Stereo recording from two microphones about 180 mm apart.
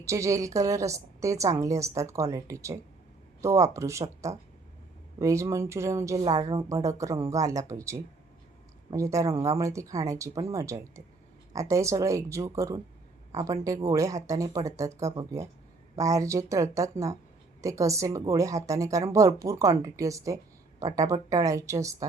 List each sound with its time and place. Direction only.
0.0 s a woman's voice: 15° right (ahead or behind)